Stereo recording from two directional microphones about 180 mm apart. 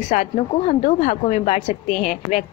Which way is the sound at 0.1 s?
40° left (ahead or behind).